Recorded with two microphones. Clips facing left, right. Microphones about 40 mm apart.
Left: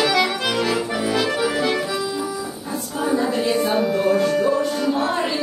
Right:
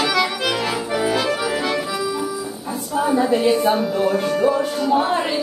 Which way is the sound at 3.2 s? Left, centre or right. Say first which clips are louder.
Right 4 dB; centre.